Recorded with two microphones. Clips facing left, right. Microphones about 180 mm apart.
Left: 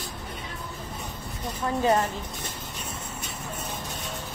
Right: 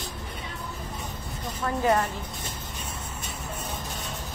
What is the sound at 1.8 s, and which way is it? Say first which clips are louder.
Speech: left 1 dB; 20° left (ahead or behind).